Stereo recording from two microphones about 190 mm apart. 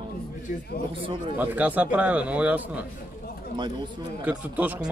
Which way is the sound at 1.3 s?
10° right (ahead or behind).